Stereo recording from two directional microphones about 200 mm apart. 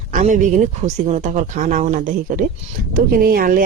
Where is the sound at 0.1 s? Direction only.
40° right (ahead or behind).